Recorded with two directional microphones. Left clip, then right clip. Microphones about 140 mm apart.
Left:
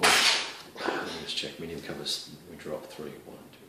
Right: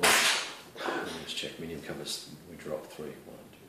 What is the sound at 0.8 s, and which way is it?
Speech, 20° left (ahead or behind).